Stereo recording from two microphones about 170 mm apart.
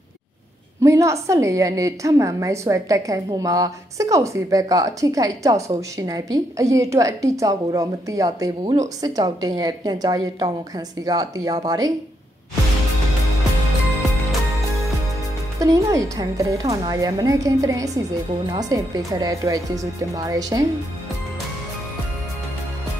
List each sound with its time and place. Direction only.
0.8 s a woman's voice: 15° right (ahead or behind)
15.6 s a woman's voice: 20° right (ahead or behind)